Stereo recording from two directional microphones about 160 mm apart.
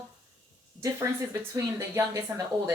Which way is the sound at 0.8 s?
20° right (ahead or behind).